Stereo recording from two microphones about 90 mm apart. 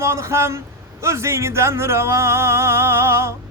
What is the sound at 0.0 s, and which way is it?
Speech, 30° right (ahead or behind).